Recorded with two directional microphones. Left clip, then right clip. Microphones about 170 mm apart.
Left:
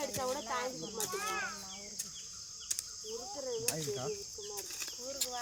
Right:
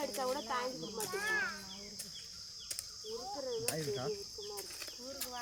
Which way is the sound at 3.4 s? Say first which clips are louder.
Left 1 dB; centre (ahead or behind).